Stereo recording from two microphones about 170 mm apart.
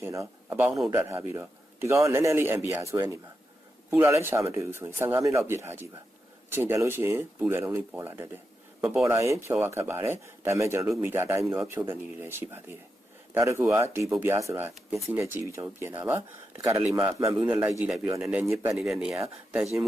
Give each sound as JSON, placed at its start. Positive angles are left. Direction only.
{"t": 0.0, "sound": "a man's voice", "side_deg": -15}
{"t": 14.9, "sound": "speech", "side_deg": 0}
{"t": 15.2, "sound": "a man's voice", "side_deg": -15}
{"t": 18.8, "sound": "speech", "side_deg": -5}